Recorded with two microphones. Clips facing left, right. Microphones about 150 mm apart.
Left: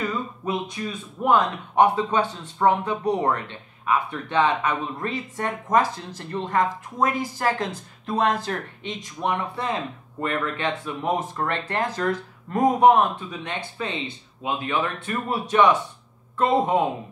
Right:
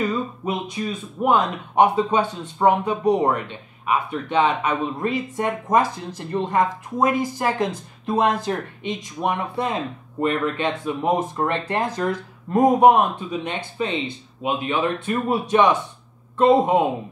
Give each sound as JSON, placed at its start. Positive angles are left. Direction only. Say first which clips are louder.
{"t": 0.8, "sound": "speech", "louder": "right 4 dB", "side_deg": -20}